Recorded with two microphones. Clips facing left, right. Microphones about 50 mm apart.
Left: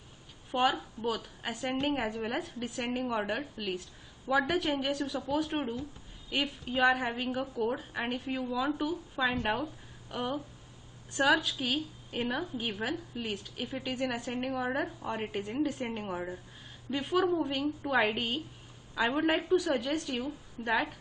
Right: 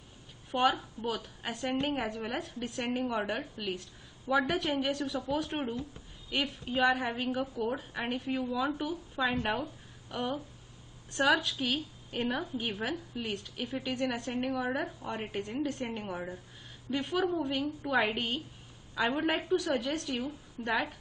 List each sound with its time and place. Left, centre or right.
0.5 s a woman's voice: centre
11.1 s a woman's voice: centre